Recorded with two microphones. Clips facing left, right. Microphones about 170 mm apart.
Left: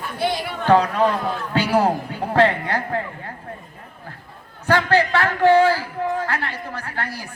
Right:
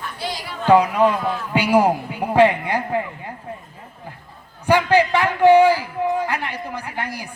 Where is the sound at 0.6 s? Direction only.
10° right (ahead or behind).